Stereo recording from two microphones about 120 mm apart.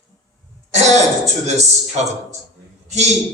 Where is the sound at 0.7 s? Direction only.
70° right (ahead or behind).